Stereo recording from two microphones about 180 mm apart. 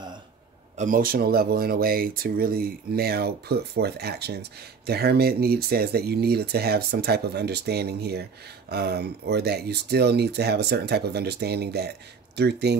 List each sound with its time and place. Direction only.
0.7 s speech: 50° right (ahead or behind); by 12.7 s 70° right (ahead or behind)